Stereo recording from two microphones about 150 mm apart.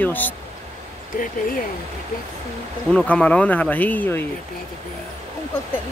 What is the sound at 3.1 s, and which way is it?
Speech, 10° left (ahead or behind).